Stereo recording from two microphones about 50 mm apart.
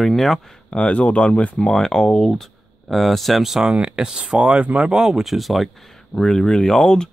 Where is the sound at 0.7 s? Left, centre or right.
Left.